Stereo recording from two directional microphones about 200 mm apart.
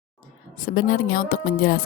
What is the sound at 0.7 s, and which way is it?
A woman's voice, 45° left (ahead or behind).